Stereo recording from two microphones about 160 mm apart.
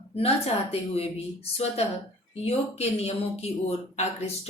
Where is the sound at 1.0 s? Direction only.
40° left (ahead or behind).